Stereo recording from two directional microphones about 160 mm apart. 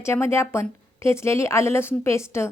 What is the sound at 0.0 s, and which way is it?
A woman's voice, 15° left (ahead or behind).